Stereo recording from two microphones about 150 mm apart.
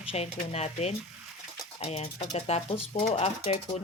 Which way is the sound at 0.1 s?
45° left (ahead or behind).